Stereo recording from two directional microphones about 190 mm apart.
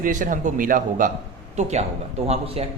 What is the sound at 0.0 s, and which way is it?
A man's voice, 45° right (ahead or behind).